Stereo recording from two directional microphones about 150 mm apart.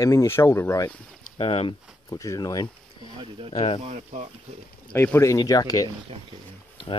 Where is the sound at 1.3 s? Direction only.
40° left (ahead or behind).